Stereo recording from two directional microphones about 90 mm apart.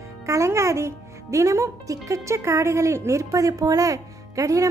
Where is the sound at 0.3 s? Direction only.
35° right (ahead or behind).